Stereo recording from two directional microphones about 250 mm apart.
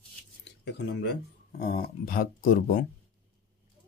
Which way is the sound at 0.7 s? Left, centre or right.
Left.